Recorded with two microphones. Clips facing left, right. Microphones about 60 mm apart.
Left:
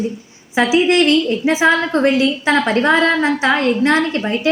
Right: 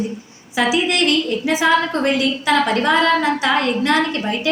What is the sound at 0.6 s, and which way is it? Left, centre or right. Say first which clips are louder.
A woman's voice: left 4 dB; left.